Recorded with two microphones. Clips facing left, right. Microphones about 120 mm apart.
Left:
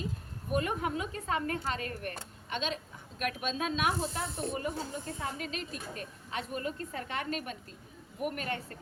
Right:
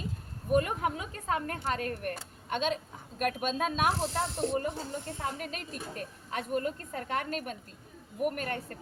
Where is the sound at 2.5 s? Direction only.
50° right (ahead or behind).